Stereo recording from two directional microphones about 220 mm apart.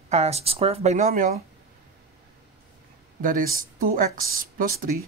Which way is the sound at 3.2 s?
40° right (ahead or behind).